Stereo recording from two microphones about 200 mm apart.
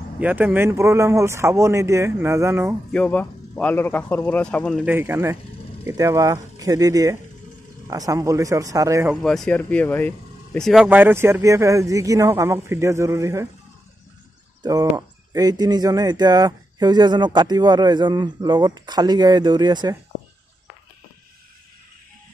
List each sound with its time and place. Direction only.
0.2 s speech: 10° right (ahead or behind)
2.9 s speech: 5° left (ahead or behind)
4.8 s speech: 10° right (ahead or behind)
9.1 s speech: centre (ahead or behind); by 13.5 s 15° right (ahead or behind)
14.6 s speech: 20° right (ahead or behind)